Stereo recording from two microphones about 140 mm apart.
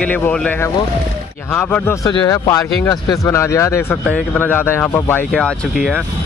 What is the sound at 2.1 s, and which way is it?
Speech, 30° left (ahead or behind).